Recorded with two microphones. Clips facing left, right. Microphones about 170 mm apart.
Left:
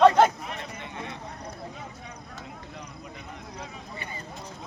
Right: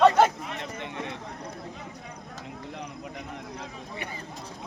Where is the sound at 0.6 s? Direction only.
70° right (ahead or behind).